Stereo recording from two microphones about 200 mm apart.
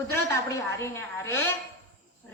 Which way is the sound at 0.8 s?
15° left (ahead or behind).